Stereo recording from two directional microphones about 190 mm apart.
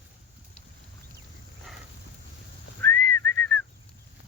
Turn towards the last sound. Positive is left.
turn(degrees=5)  # may be behind; listen again after turning